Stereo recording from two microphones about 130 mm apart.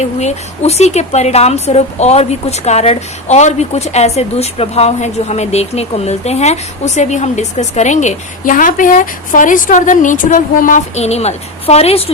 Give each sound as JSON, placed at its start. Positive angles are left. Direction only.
{"t": 0.0, "sound": "speech", "side_deg": 60}
{"t": 11.0, "sound": "a woman's voice", "side_deg": 55}